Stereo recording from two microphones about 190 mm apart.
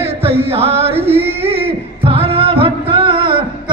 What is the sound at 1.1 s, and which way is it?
Singing, 30° right (ahead or behind).